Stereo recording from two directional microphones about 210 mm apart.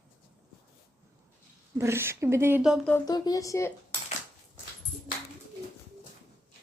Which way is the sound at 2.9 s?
20° left (ahead or behind).